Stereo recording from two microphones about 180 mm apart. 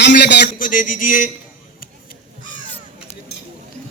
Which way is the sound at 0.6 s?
50° left (ahead or behind).